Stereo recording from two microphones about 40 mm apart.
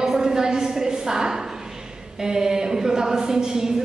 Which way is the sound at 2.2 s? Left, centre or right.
Centre.